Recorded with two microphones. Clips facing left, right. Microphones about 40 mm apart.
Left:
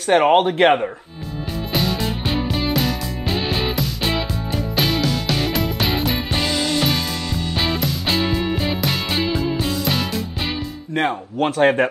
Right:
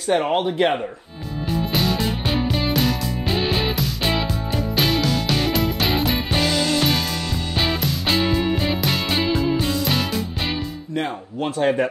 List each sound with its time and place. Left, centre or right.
0.1 s speech: left
1.7 s music: centre
11.0 s speech: left